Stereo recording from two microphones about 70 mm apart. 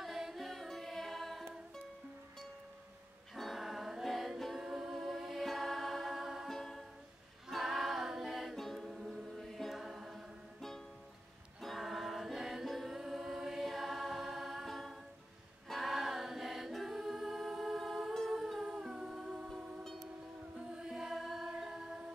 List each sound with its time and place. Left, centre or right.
0.0 s music: centre
3.3 s music: centre
15.7 s a capella: centre
18.1 s music: centre
18.6 s humming: centre
19.8 s train: centre
20.5 s music: centre